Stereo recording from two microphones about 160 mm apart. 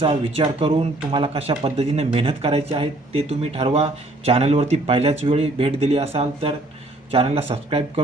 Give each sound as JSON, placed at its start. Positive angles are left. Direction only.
{"t": 0.0, "sound": "speech", "side_deg": -35}